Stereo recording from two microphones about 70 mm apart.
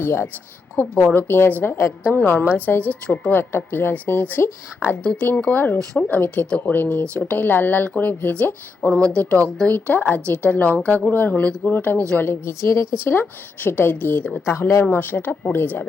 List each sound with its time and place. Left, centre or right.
0.0 s a woman's voice: left
5.0 s a woman's voice: centre